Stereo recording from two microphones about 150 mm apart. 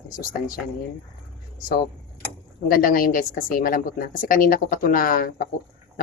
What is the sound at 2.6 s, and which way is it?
A woman's voice, 70° left (ahead or behind).